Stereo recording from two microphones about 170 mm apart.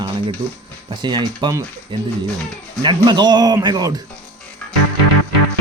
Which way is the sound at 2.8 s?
25° right (ahead or behind).